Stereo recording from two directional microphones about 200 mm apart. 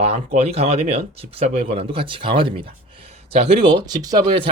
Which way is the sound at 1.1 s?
30° right (ahead or behind).